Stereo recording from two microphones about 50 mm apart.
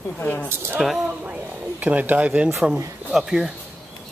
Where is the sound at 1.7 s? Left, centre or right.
Right.